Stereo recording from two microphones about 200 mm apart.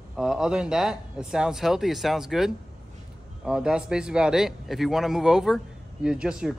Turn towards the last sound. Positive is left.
turn(degrees=-5)  # may be behind; listen again after turning